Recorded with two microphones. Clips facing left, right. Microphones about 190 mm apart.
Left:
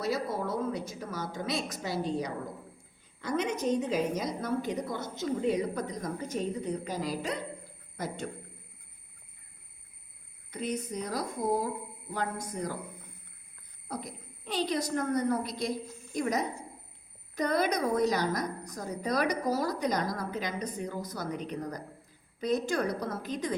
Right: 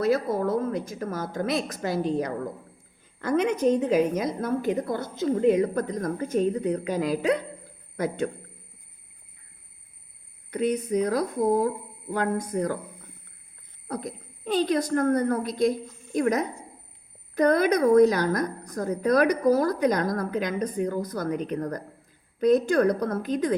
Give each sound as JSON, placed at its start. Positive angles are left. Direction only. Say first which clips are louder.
{"t": 0.0, "sound": "a woman's voice", "louder": "right 8 dB", "side_deg": -55}
{"t": 10.5, "sound": "a woman's voice", "louder": "right 10 dB", "side_deg": -60}
{"t": 14.4, "sound": "a woman's voice", "louder": "right 7 dB", "side_deg": -50}